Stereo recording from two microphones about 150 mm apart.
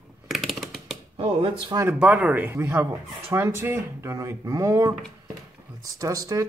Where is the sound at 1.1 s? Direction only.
30° right (ahead or behind).